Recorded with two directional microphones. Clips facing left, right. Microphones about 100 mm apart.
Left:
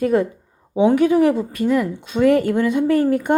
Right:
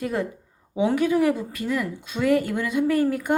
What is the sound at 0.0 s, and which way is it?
A woman's voice, 25° left (ahead or behind).